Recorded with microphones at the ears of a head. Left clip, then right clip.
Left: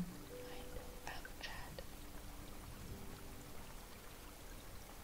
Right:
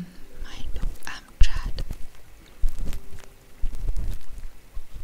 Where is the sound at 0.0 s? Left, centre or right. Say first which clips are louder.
Right 5 dB; right.